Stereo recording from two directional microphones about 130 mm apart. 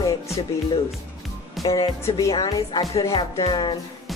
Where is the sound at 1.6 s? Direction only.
30° left (ahead or behind).